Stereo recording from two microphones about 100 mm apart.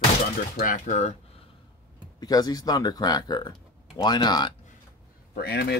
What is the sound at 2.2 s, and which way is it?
Speech, 40° left (ahead or behind).